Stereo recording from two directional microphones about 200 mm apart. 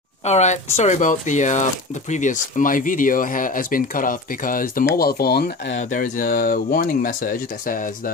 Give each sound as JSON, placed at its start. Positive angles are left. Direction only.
{"t": 0.2, "sound": "speech", "side_deg": 35}
{"t": 5.8, "sound": "speech", "side_deg": 40}